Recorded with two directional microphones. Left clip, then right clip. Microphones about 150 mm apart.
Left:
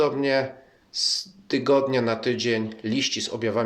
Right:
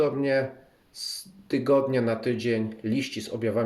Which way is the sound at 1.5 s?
25° right (ahead or behind).